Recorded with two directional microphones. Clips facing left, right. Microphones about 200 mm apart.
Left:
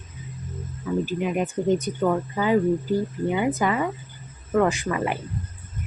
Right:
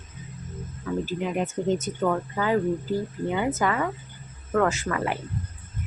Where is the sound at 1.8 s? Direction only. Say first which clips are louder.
Left 2 dB; 15° left (ahead or behind).